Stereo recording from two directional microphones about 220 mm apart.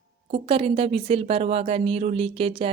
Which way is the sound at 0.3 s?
25° right (ahead or behind).